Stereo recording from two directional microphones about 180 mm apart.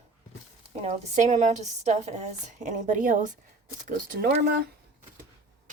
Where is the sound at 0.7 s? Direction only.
40° right (ahead or behind); by 4.5 s 55° right (ahead or behind).